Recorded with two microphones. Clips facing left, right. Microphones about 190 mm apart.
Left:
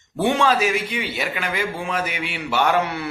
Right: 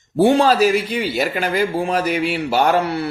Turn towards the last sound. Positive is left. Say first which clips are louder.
# right 3 dB
turn(degrees=-35)  # may be behind; listen again after turning